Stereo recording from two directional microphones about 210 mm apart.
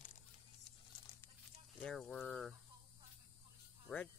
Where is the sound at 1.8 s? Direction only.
5° left (ahead or behind).